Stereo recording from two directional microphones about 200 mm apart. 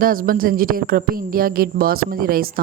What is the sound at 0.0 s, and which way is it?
A woman's voice, 45° right (ahead or behind).